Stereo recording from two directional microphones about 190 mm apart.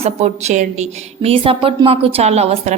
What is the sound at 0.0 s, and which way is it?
A woman's voice, 35° right (ahead or behind).